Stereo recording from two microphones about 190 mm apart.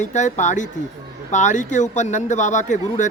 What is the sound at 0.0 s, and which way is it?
Speech, 40° left (ahead or behind).